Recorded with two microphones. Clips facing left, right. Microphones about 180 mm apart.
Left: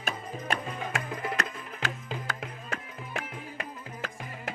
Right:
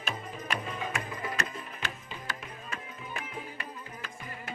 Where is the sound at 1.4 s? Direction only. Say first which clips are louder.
Left 3 dB; 90° left.